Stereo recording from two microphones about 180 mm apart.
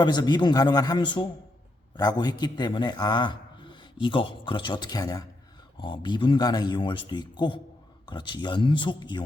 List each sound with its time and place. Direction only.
0.0 s a man's voice: 25° left (ahead or behind)